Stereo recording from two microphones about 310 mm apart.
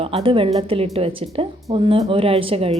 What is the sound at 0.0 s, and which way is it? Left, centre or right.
Speech, centre.